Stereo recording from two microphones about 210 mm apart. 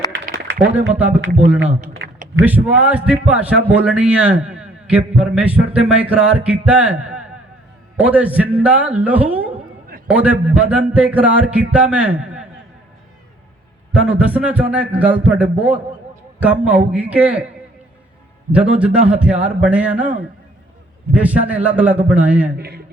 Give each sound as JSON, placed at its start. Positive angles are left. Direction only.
{"t": 1.2, "sound": "speech", "side_deg": -45}
{"t": 2.4, "sound": "a man's voice", "side_deg": -5}
{"t": 13.9, "sound": "a man's voice", "side_deg": -5}
{"t": 18.5, "sound": "a man's voice", "side_deg": -5}
{"t": 22.5, "sound": "speech", "side_deg": -50}